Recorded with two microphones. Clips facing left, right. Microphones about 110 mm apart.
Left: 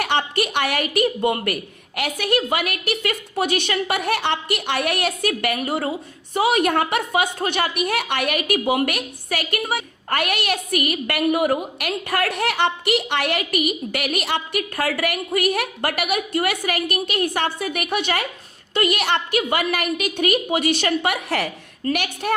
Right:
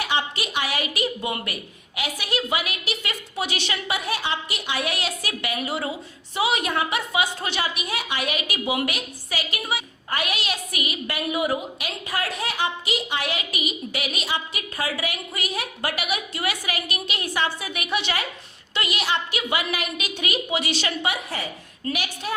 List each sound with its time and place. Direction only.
0.0 s a woman's voice: 55° left (ahead or behind); by 21.5 s 75° left (ahead or behind)
21.9 s a woman's voice: 60° left (ahead or behind)